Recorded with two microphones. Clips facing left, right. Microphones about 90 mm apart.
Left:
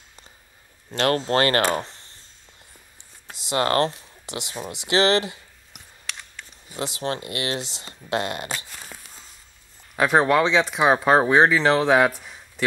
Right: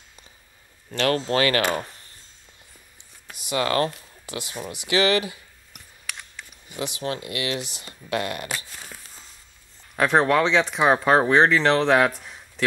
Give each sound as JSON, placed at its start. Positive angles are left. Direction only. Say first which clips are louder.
{"t": 0.9, "sound": "speech", "louder": "left 1 dB", "side_deg": 35}
{"t": 3.3, "sound": "speech", "louder": "left 2 dB", "side_deg": 25}
{"t": 3.9, "sound": "speech", "louder": "even", "side_deg": 25}
{"t": 5.7, "sound": "a sound", "louder": "even", "side_deg": 0}
{"t": 6.7, "sound": "speech", "louder": "left 1 dB", "side_deg": 35}
{"t": 9.9, "sound": "speech", "louder": "left 1 dB", "side_deg": 0}